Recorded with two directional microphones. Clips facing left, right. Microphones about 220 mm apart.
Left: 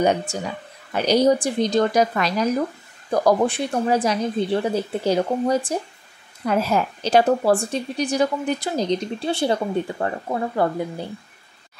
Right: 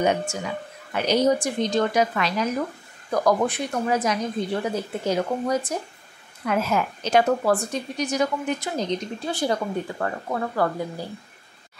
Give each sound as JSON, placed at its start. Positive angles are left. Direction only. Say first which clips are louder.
{"t": 0.3, "sound": "a woman's voice", "louder": "left 1 dB", "side_deg": 35}